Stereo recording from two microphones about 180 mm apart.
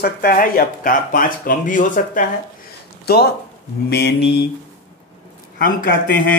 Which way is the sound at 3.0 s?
60° left (ahead or behind).